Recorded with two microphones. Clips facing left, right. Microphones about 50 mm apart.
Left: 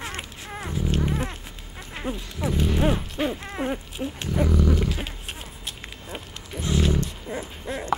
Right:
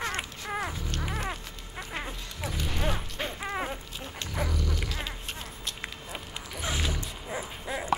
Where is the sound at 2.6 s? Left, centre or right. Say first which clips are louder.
Left 8 dB; centre.